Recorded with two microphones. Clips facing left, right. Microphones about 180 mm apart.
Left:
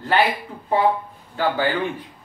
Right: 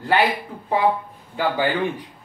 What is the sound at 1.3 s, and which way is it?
Speech, 15° right (ahead or behind).